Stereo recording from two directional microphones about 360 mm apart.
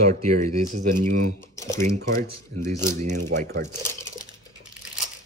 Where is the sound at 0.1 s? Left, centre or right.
Centre.